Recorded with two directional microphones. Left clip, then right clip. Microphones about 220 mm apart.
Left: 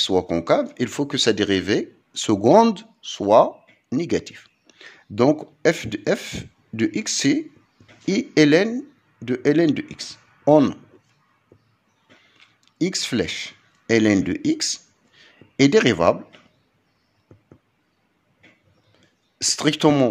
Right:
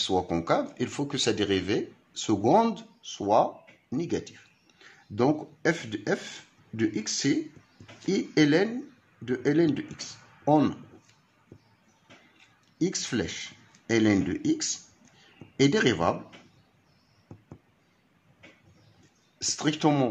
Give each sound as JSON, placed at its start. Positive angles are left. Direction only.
{"t": 0.0, "sound": "speech", "side_deg": 35}
{"t": 12.4, "sound": "speech", "side_deg": 40}
{"t": 19.3, "sound": "speech", "side_deg": 40}